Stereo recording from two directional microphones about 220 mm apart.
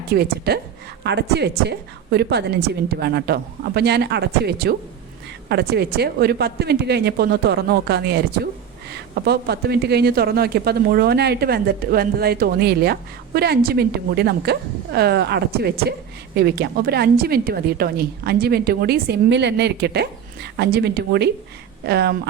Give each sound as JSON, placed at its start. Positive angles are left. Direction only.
{"t": 0.1, "sound": "speech", "side_deg": -45}